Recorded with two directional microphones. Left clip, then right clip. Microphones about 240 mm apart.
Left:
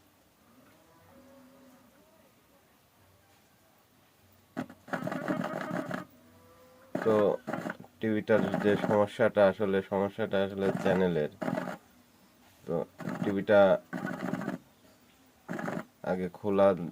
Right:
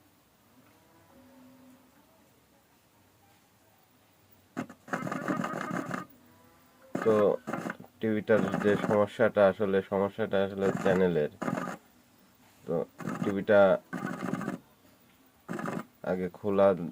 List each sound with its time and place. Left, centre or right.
4.5 s sewing machine: centre
6.9 s speech: centre
12.6 s a sound: centre